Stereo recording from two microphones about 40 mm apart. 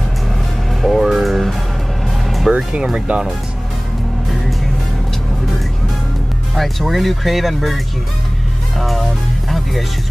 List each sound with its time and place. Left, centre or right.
0.8 s speech: centre
2.0 s vehicle: centre
2.5 s speech: right
6.5 s speech: centre
8.7 s music: centre